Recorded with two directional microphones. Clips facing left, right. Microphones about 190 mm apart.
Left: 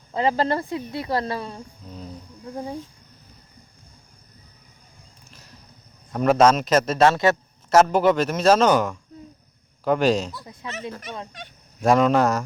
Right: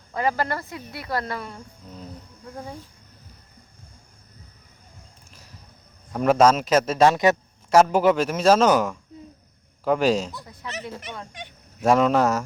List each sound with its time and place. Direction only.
0.1 s speech: 20° left (ahead or behind)
6.1 s a man's voice: 5° right (ahead or behind)
10.4 s speech: 20° left (ahead or behind)
11.8 s a man's voice: 5° right (ahead or behind)